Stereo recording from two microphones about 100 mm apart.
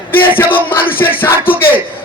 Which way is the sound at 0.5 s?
20° left (ahead or behind).